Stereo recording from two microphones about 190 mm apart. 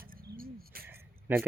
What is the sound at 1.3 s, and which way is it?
Speech, 10° right (ahead or behind).